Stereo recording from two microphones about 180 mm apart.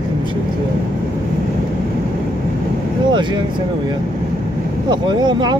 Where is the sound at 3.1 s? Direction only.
25° right (ahead or behind).